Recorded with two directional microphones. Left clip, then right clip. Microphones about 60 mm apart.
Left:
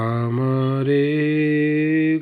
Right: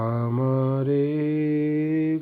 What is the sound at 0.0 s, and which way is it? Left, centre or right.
Mantra, centre.